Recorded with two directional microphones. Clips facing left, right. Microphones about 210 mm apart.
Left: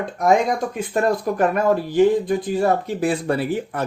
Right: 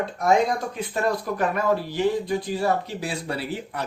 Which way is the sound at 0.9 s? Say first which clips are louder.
Left 5 dB; 50° left (ahead or behind).